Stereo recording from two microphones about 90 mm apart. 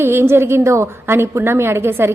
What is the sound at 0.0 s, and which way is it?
A woman's voice, 30° right (ahead or behind).